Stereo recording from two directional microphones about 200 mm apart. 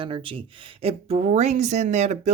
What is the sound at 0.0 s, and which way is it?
Speech, 25° right (ahead or behind).